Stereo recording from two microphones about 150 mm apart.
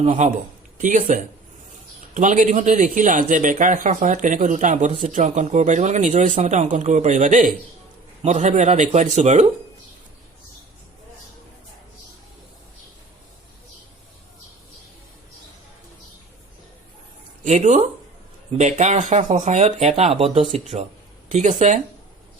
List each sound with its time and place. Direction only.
0.0 s a man's voice: 55° right (ahead or behind)
17.4 s a man's voice: 50° right (ahead or behind)
21.2 s a man's voice: 55° right (ahead or behind)